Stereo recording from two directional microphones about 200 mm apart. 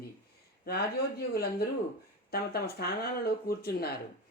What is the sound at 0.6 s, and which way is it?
Speech, 50° left (ahead or behind).